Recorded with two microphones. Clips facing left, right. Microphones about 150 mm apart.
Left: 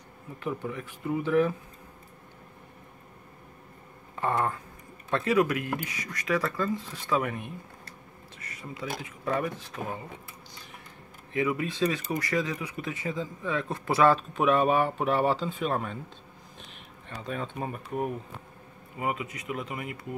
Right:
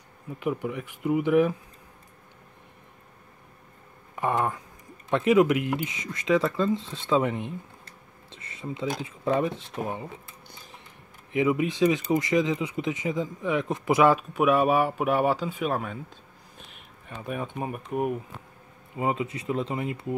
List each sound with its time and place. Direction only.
0.4 s speech: 15° right (ahead or behind)
4.1 s speech: 15° right (ahead or behind)
11.3 s speech: 20° right (ahead or behind)
17.2 s speech: 15° right (ahead or behind)
18.9 s speech: 25° right (ahead or behind)